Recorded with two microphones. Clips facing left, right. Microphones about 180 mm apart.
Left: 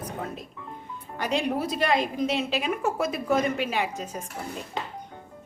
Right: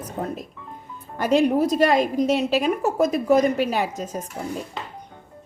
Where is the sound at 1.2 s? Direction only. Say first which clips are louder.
Right 8 dB; 45° right (ahead or behind).